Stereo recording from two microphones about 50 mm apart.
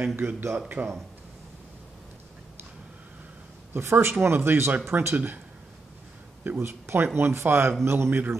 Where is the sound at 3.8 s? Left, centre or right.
Right.